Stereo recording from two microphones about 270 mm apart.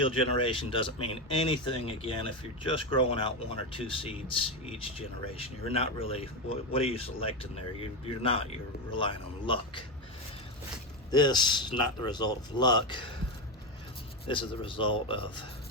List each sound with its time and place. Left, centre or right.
0.0 s speech: centre
11.1 s speech: centre
14.3 s speech: centre